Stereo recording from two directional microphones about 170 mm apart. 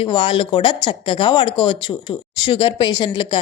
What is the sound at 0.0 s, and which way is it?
Speech, 30° left (ahead or behind).